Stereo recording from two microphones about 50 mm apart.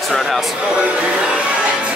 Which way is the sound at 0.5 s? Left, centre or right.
Right.